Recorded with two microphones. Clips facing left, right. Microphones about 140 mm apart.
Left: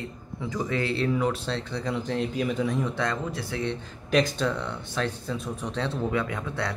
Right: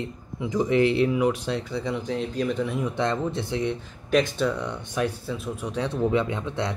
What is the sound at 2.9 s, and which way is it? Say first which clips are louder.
Speech: right 4 dB; 25° right (ahead or behind).